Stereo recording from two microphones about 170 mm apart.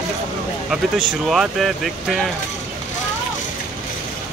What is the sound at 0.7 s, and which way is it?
Speech, centre (ahead or behind).